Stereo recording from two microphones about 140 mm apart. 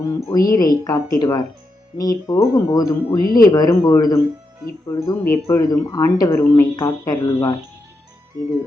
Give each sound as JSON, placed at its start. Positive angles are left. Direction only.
{"t": 0.0, "sound": "speech", "side_deg": 25}